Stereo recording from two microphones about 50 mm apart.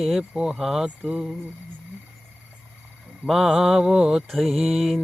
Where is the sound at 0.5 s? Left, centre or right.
Centre.